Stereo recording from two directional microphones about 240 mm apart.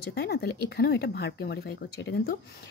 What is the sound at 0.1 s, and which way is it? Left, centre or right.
Speech, left.